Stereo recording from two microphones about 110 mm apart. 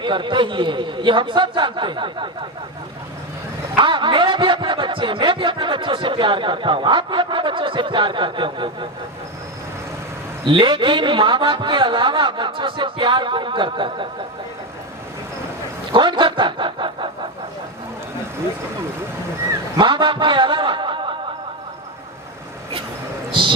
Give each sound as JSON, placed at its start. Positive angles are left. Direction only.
{"t": 0.0, "sound": "speech", "side_deg": -45}
{"t": 3.8, "sound": "speech", "side_deg": -45}
{"t": 10.4, "sound": "speech", "side_deg": -50}
{"t": 15.9, "sound": "a sound", "side_deg": -45}
{"t": 19.7, "sound": "snicker", "side_deg": -45}
{"t": 23.3, "sound": "speech", "side_deg": -50}